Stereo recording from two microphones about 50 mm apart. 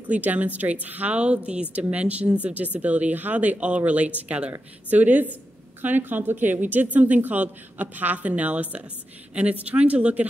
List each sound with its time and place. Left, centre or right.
0.0 s a woman's voice: right